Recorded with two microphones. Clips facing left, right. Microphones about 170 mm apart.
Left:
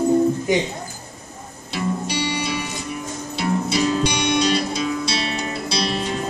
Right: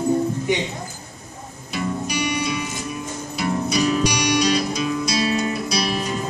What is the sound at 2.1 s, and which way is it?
Music, 30° left (ahead or behind).